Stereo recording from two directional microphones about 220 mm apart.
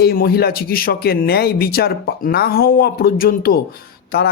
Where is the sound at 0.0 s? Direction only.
45° left (ahead or behind).